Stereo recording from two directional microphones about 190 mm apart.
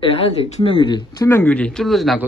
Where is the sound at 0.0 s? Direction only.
30° left (ahead or behind).